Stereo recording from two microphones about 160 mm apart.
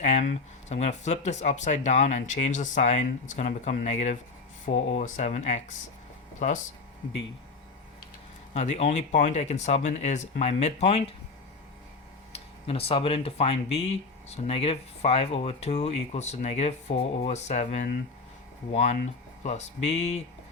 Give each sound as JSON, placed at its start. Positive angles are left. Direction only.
{"t": 0.0, "sound": "speech", "side_deg": 45}
{"t": 8.5, "sound": "speech", "side_deg": 45}
{"t": 12.3, "sound": "speech", "side_deg": 35}